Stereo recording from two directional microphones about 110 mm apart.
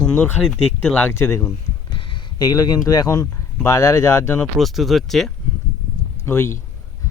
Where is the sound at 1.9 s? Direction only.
50° left (ahead or behind); by 4.4 s 25° left (ahead or behind).